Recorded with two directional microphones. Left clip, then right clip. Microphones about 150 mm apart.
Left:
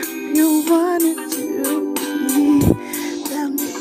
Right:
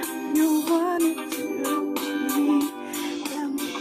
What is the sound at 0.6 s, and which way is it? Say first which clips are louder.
Music: left 7 dB; 20° left (ahead or behind).